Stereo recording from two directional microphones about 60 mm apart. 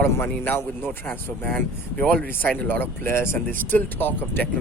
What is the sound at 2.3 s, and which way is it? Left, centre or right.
A man's voice, left.